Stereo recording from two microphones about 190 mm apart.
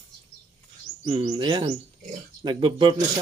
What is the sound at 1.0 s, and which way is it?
Speech, 25° right (ahead or behind).